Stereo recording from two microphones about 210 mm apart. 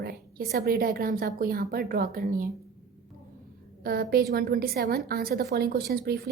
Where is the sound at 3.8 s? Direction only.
45° right (ahead or behind).